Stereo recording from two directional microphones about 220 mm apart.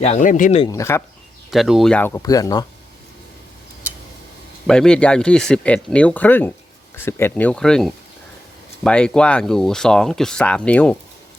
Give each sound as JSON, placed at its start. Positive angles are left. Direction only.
{"t": 0.0, "sound": "speech", "side_deg": 30}
{"t": 0.6, "sound": "speech", "side_deg": 15}
{"t": 1.5, "sound": "speech", "side_deg": 0}
{"t": 4.6, "sound": "speech", "side_deg": 5}